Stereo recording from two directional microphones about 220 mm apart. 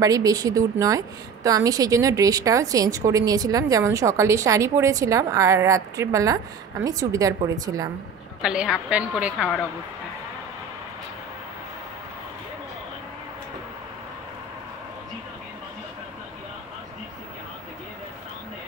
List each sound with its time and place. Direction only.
0.0 s a woman's voice: 15° right (ahead or behind)
8.4 s a woman's voice: 5° right (ahead or behind)